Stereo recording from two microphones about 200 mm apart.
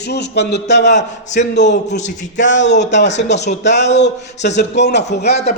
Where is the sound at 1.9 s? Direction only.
35° left (ahead or behind).